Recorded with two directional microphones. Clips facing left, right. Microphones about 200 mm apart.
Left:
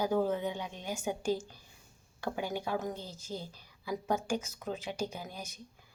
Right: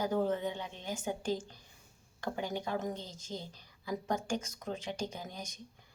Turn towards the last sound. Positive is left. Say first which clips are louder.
# left 1 dB
turn(degrees=5)  # may be behind; listen again after turning